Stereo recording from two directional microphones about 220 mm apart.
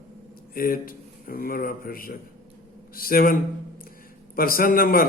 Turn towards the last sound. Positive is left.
turn(degrees=40)  # may be behind; listen again after turning